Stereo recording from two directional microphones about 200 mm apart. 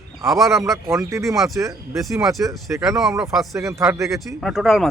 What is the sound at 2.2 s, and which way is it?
Speech, centre (ahead or behind).